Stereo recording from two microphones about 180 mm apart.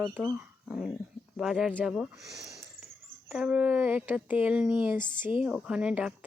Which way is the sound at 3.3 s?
5° right (ahead or behind).